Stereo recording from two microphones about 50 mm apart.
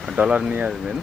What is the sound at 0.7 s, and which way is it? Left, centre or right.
Speech, centre.